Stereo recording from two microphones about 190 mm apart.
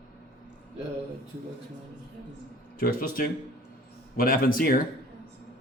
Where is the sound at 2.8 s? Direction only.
45° left (ahead or behind).